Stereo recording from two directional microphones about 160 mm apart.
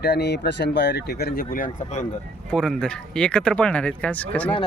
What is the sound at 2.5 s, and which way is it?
Speech, 5° left (ahead or behind).